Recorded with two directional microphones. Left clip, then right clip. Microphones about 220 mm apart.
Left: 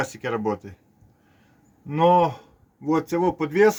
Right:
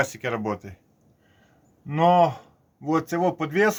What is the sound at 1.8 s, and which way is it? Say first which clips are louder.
Speech: even; 15° right (ahead or behind).